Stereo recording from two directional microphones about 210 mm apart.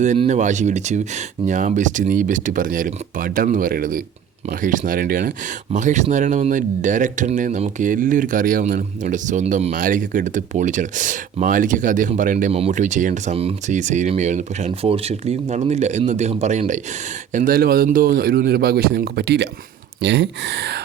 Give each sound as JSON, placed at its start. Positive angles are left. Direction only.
{"t": 0.0, "sound": "speech", "side_deg": -35}